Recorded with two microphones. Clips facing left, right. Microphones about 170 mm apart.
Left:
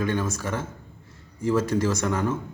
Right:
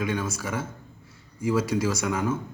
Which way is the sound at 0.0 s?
10° right (ahead or behind).